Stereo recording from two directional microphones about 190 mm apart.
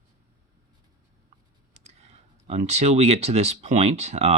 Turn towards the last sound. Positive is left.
turn(degrees=-35)  # may be behind; listen again after turning